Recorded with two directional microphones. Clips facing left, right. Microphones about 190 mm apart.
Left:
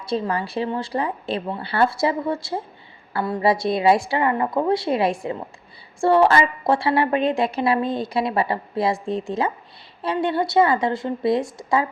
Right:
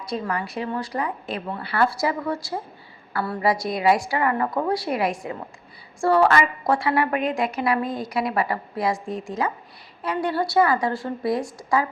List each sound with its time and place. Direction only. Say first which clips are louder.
0.0 s a woman's voice: left 3 dB; 30° left (ahead or behind)